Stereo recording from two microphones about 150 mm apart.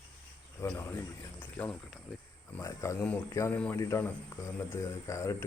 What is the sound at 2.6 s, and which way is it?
Speech, 20° left (ahead or behind).